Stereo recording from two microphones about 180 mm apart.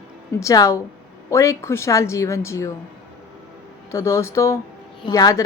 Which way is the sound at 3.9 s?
15° left (ahead or behind).